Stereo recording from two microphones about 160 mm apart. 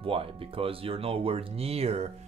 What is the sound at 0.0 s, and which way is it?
Speech, 35° right (ahead or behind).